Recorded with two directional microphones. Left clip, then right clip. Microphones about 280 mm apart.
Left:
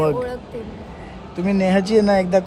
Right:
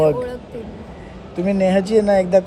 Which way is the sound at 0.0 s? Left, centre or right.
Centre.